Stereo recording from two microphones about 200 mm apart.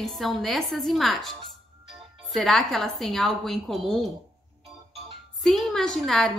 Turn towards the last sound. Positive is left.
turn(degrees=0)  # may be behind; listen again after turning